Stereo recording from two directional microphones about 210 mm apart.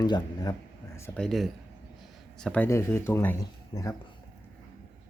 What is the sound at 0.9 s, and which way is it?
Speech, 10° left (ahead or behind).